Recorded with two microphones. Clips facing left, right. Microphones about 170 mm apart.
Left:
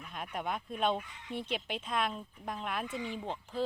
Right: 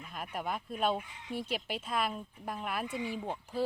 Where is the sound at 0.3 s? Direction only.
5° right (ahead or behind).